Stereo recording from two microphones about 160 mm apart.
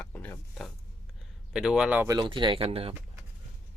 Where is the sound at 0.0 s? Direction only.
10° left (ahead or behind).